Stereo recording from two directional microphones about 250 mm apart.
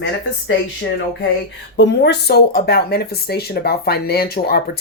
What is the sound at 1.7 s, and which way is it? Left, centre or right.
Speech, left.